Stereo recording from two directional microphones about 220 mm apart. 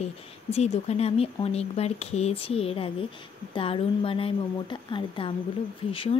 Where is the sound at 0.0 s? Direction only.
30° left (ahead or behind).